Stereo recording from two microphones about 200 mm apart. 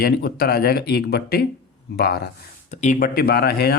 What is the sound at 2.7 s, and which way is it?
Speech, 35° left (ahead or behind).